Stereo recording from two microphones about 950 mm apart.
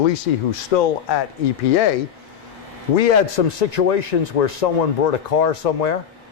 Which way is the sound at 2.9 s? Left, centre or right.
Left.